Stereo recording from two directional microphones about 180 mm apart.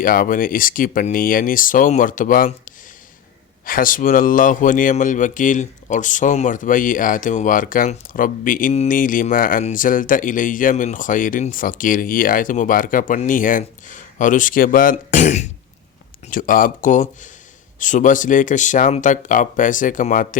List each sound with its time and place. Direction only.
0.0 s speech: 50° left (ahead or behind)